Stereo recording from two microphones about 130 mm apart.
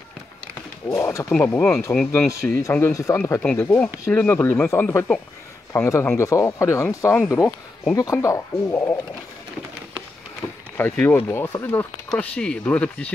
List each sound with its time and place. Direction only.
0.8 s speech: 20° left (ahead or behind)
1.3 s speech: 10° left (ahead or behind)
10.4 s vehicle: 25° left (ahead or behind)
10.8 s speech: 15° left (ahead or behind)